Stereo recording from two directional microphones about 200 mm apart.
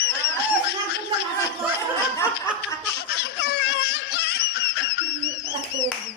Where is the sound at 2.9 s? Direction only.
55° left (ahead or behind).